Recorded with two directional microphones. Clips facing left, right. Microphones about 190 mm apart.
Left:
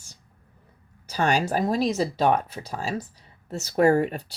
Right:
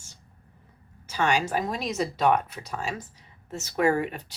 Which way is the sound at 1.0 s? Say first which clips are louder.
Left 2 dB; 40° left (ahead or behind).